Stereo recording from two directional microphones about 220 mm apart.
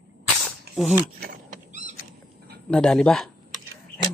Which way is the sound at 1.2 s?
35° right (ahead or behind).